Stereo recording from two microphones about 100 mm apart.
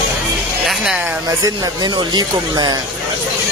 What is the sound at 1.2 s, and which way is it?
Speech, 40° right (ahead or behind).